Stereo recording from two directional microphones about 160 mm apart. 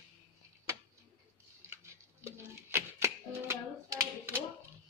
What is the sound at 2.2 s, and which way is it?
Music, 15° right (ahead or behind).